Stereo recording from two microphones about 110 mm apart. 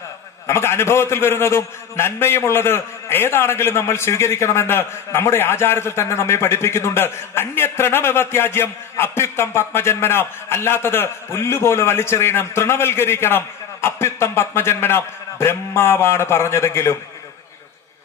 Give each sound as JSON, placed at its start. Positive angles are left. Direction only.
{"t": 0.5, "sound": "a man's voice", "side_deg": 25}